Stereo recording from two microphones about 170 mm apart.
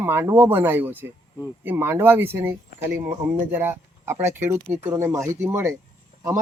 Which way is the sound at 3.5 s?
15° right (ahead or behind).